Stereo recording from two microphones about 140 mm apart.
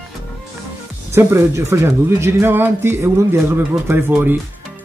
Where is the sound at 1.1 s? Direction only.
20° right (ahead or behind).